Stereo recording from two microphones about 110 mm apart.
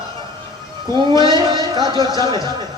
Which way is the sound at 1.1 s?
40° right (ahead or behind).